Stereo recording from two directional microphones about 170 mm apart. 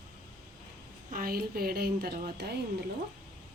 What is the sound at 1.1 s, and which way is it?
Speech, 60° right (ahead or behind).